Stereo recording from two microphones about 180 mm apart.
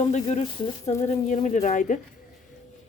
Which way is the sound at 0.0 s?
40° left (ahead or behind).